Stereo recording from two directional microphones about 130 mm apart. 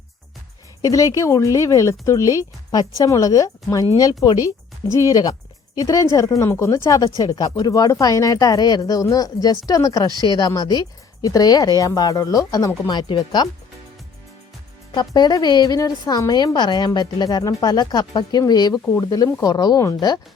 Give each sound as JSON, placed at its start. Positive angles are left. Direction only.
{"t": 0.8, "sound": "a woman's voice", "side_deg": 25}
{"t": 14.9, "sound": "a woman's voice", "side_deg": 30}